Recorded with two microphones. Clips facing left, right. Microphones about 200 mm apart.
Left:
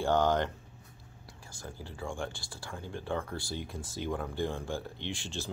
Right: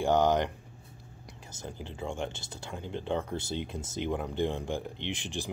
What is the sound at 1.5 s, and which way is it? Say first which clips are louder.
Speech: right 3 dB; 20° right (ahead or behind).